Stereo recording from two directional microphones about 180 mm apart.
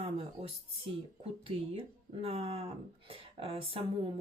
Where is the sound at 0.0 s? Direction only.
35° right (ahead or behind).